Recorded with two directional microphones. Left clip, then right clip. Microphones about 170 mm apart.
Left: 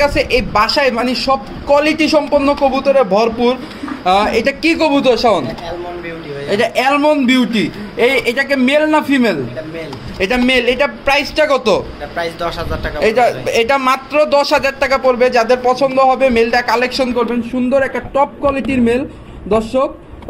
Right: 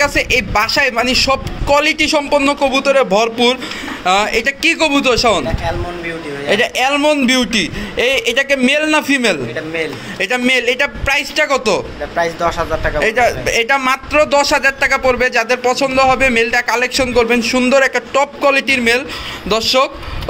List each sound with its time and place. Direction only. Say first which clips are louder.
0.0 s a man's voice: even; 5° right (ahead or behind)
6.5 s a man's voice: left 1 dB; 15° right (ahead or behind)
10.1 s a man's voice: left 1 dB; centre (ahead or behind)
12.2 s speech: right 4 dB; 20° right (ahead or behind)
13.0 s a man's voice: left 3 dB; 5° left (ahead or behind)
17.9 s a man's voice: even; 15° right (ahead or behind)
18.5 s a man's voice: right 3 dB; centre (ahead or behind)